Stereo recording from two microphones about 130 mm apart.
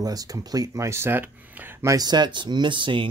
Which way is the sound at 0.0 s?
30° right (ahead or behind).